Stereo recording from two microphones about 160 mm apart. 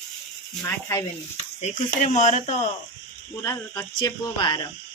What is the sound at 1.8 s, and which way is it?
Speech, 55° left (ahead or behind).